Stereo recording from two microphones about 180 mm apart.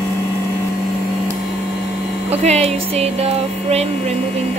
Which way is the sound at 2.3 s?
35° right (ahead or behind).